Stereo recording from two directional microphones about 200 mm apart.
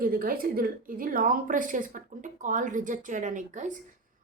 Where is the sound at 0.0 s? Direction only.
45° right (ahead or behind).